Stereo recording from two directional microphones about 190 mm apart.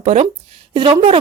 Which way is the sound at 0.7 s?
25° right (ahead or behind).